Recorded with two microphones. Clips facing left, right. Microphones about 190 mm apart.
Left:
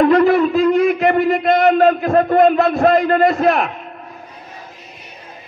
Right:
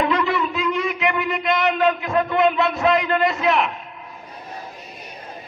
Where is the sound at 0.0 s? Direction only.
45° left (ahead or behind).